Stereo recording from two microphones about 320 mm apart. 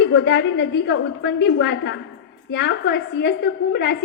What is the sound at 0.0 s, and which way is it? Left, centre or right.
A woman's voice, left.